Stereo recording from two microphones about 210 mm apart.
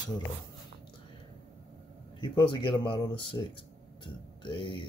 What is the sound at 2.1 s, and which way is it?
Speech, 20° left (ahead or behind).